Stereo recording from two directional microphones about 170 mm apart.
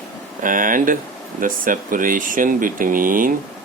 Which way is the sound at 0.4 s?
50° right (ahead or behind).